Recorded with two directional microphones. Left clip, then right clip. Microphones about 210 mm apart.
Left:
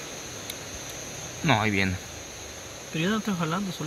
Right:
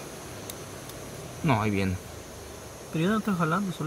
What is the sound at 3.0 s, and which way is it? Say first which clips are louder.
Speech: right 1 dB; 35° right (ahead or behind).